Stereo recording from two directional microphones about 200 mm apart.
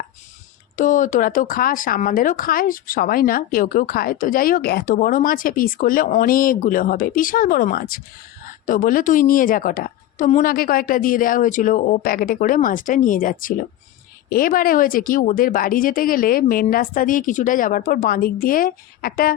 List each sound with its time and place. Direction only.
0.8 s speech: 40° left (ahead or behind)